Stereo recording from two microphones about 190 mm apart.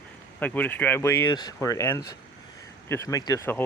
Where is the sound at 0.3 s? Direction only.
10° left (ahead or behind).